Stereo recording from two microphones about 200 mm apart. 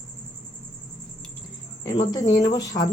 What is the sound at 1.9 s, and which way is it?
Speech, 20° left (ahead or behind).